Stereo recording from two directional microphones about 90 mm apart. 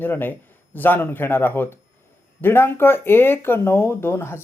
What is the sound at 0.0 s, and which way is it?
Speech, 20° left (ahead or behind).